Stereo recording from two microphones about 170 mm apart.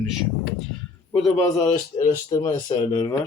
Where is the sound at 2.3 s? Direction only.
25° left (ahead or behind).